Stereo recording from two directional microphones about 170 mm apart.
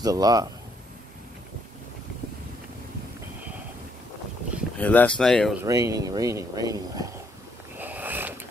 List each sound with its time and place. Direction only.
0.0 s speech: 20° right (ahead or behind)
4.7 s speech: 10° left (ahead or behind)
5.6 s speech: 20° right (ahead or behind)
7.8 s a sound: 10° right (ahead or behind)